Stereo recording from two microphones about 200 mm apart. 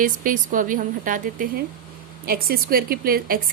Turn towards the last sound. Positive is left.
turn(degrees=-45)  # may be behind; listen again after turning